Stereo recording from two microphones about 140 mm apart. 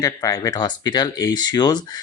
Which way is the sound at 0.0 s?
25° left (ahead or behind).